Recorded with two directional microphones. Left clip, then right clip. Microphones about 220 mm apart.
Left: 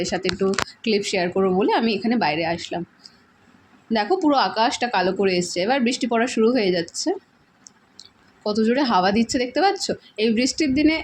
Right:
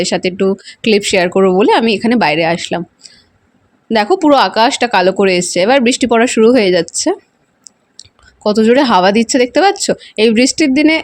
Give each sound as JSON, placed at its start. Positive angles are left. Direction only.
{"t": 0.0, "sound": "speech", "side_deg": -45}
{"t": 8.0, "sound": "clicking", "side_deg": -45}
{"t": 8.4, "sound": "speech", "side_deg": -40}